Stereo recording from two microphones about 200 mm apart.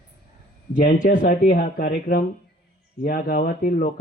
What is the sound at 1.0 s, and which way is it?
Speech, 45° left (ahead or behind).